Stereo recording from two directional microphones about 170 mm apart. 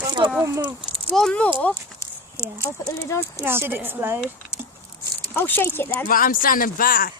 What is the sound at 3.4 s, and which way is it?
Speech, 15° right (ahead or behind).